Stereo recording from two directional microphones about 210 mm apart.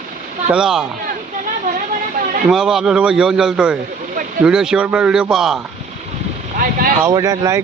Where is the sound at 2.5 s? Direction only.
Centre (ahead or behind).